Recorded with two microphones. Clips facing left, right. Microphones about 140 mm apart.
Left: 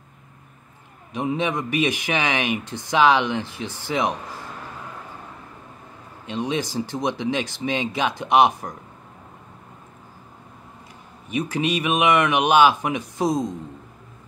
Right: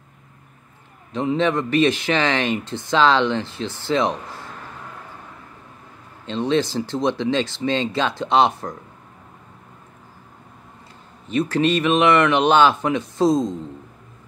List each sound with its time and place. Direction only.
1.1 s speech: 15° left (ahead or behind)
6.2 s speech: 15° left (ahead or behind)
11.2 s speech: 15° left (ahead or behind)
13.3 s speech: 20° right (ahead or behind)